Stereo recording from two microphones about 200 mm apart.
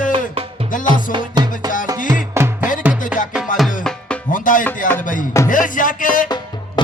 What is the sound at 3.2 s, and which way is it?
Music, 40° left (ahead or behind).